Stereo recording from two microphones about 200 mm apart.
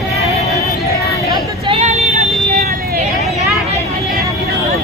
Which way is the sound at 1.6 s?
30° right (ahead or behind).